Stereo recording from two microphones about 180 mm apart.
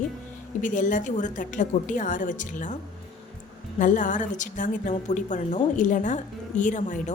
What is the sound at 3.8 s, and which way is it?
A woman's voice, 45° left (ahead or behind).